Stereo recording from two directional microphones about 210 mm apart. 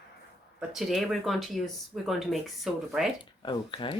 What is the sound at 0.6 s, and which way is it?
Speech, centre (ahead or behind).